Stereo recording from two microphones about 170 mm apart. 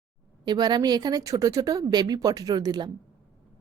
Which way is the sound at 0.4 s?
25° right (ahead or behind).